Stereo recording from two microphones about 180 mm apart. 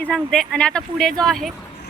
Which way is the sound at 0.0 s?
5° left (ahead or behind).